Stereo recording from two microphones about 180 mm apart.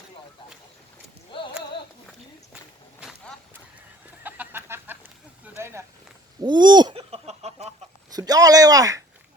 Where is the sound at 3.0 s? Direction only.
5° right (ahead or behind).